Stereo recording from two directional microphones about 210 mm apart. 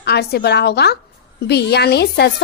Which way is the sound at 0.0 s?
50° left (ahead or behind).